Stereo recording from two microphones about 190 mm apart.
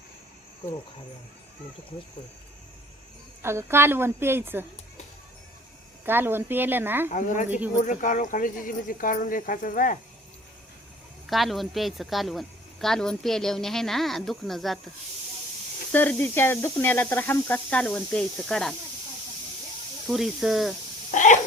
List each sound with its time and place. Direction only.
3.4 s a woman's voice: 15° right (ahead or behind)
6.1 s a woman's voice: 10° right (ahead or behind)
7.1 s speech: 40° left (ahead or behind)
7.4 s a woman's voice: 10° right (ahead or behind)
7.8 s speech: 40° left (ahead or behind)
11.3 s speech: centre (ahead or behind)
15.9 s speech: 10° left (ahead or behind)
20.1 s speech: centre (ahead or behind)
21.1 s a sound: 40° left (ahead or behind)